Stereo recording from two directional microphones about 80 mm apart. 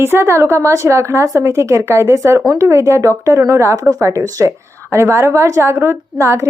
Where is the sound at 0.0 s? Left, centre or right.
Right.